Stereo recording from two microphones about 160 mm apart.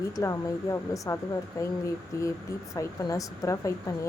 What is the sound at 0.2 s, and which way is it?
Speech, 20° left (ahead or behind).